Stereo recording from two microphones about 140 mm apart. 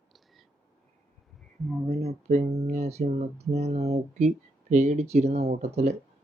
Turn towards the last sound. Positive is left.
turn(degrees=-50)  # may be behind; listen again after turning